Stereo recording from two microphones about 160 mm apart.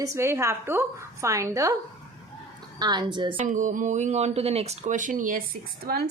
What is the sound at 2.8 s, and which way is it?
Speech, 25° right (ahead or behind).